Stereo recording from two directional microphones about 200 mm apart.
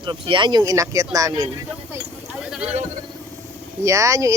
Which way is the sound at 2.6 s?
35° right (ahead or behind).